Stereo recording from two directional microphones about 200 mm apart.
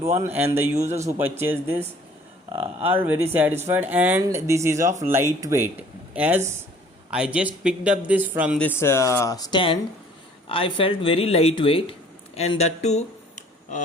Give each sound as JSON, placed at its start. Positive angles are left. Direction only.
{"t": 0.2, "sound": "speech", "side_deg": -10}
{"t": 2.5, "sound": "speech", "side_deg": -30}
{"t": 2.8, "sound": "speech", "side_deg": -10}
{"t": 8.5, "sound": "speech", "side_deg": 10}